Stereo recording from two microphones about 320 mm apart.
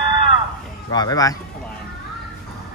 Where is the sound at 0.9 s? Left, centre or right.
Centre.